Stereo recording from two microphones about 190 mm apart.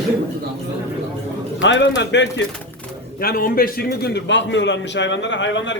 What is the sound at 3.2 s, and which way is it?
A man's voice, 50° left (ahead or behind).